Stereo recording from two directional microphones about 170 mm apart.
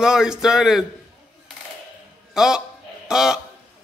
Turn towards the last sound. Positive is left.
turn(degrees=-5)  # may be behind; listen again after turning